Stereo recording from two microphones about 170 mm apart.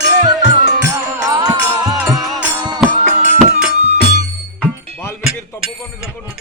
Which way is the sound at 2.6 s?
25° right (ahead or behind).